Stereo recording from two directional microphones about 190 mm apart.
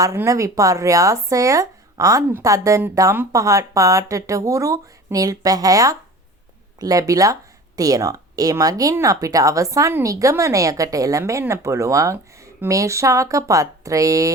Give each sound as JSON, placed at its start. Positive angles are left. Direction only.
{"t": 0.0, "sound": "speech", "side_deg": -15}